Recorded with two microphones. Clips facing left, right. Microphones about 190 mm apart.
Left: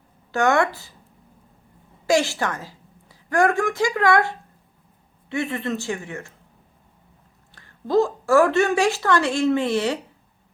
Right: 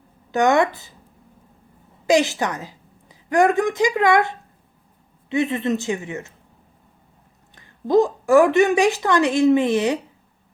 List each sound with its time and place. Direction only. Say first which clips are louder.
0.3 s a woman's voice: right 2 dB; 20° right (ahead or behind)
2.0 s a woman's voice: right 2 dB; 20° right (ahead or behind)
7.5 s a woman's voice: right 3 dB; 15° right (ahead or behind)